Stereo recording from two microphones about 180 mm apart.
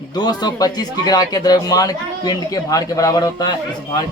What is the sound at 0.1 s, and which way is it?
Speech, 20° left (ahead or behind).